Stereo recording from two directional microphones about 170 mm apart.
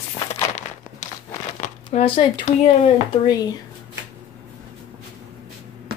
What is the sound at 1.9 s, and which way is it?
Speech, 30° left (ahead or behind).